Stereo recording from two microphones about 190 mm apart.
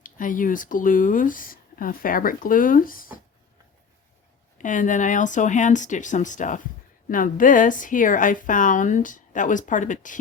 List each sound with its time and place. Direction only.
0.0 s speech: 45° left (ahead or behind)
4.5 s speech: 40° left (ahead or behind)